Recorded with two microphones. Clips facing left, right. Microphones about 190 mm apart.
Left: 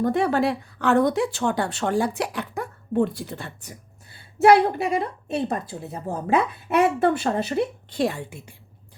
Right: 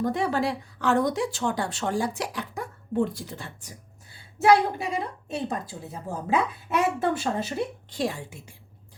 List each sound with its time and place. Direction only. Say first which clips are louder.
0.0 s speech: left 4 dB; 60° left (ahead or behind)